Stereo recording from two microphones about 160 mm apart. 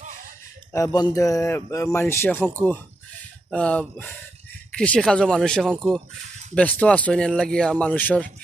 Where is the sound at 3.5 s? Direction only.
5° left (ahead or behind).